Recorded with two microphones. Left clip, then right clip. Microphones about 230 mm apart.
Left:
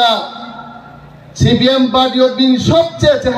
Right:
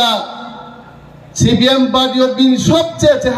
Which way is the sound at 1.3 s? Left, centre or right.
Right.